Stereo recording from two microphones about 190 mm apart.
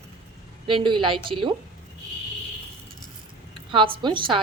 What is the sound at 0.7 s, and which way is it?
Speech, 25° right (ahead or behind).